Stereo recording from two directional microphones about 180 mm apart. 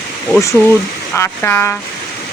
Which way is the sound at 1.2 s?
10° left (ahead or behind).